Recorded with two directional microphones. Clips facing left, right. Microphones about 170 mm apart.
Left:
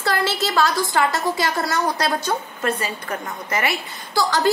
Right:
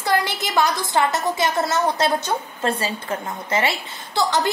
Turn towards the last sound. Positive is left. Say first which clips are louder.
# left 2 dB
turn(degrees=-20)  # may be behind; listen again after turning